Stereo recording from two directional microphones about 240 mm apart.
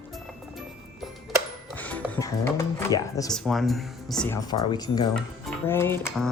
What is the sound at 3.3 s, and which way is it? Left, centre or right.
Speech, centre.